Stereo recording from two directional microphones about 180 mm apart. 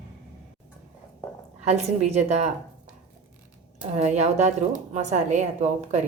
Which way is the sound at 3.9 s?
40° right (ahead or behind).